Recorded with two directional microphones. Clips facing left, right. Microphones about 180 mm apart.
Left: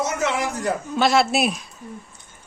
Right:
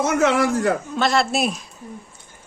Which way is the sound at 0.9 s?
5° left (ahead or behind).